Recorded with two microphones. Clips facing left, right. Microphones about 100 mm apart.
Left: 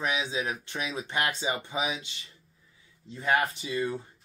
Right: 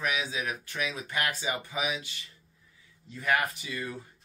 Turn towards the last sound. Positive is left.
turn(degrees=25)  # may be behind; listen again after turning